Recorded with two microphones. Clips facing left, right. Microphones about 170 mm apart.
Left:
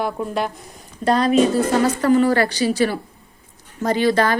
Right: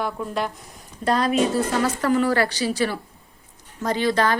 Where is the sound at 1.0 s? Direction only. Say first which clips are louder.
Left 4 dB; 5° right (ahead or behind).